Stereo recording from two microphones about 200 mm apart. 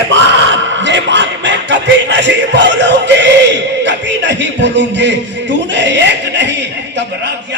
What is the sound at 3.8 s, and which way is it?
Speech, 60° right (ahead or behind).